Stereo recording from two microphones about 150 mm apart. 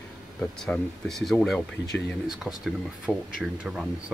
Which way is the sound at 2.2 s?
5° right (ahead or behind).